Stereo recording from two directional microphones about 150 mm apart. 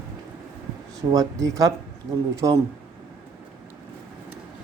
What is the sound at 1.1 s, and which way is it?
A man's voice, 20° right (ahead or behind).